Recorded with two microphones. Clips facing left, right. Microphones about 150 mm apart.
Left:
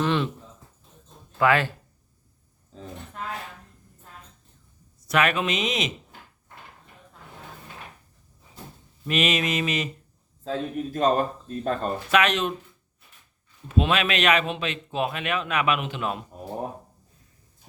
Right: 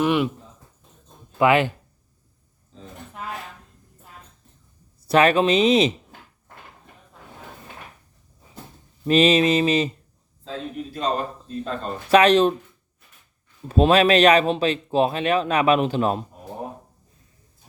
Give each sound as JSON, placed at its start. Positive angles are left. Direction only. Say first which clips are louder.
{"t": 0.0, "sound": "speech", "louder": "right 4 dB", "side_deg": -15}
{"t": 1.4, "sound": "speech", "louder": "right 4 dB", "side_deg": -20}
{"t": 4.9, "sound": "speech", "louder": "right 6 dB", "side_deg": -30}
{"t": 9.0, "sound": "speech", "louder": "right 8 dB", "side_deg": -30}
{"t": 10.4, "sound": "a man's voice", "louder": "left 3 dB", "side_deg": 45}
{"t": 12.1, "sound": "speech", "louder": "right 8 dB", "side_deg": -35}
{"t": 13.7, "sound": "speech", "louder": "right 7 dB", "side_deg": -35}